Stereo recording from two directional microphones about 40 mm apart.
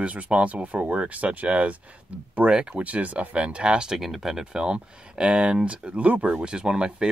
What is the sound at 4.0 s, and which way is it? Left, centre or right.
Speech, centre.